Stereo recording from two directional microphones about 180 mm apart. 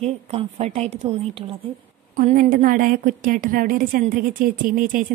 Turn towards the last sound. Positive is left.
turn(degrees=-50)  # may be behind; listen again after turning